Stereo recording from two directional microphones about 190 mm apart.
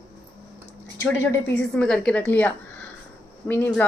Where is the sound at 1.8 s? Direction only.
5° left (ahead or behind).